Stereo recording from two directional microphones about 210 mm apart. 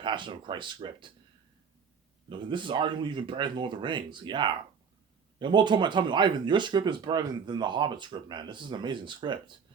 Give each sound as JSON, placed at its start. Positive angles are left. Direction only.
{"t": 0.0, "sound": "speech", "side_deg": -20}
{"t": 2.4, "sound": "speech", "side_deg": -20}